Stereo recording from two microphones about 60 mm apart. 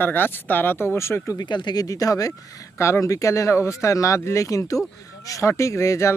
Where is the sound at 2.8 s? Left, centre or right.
Left.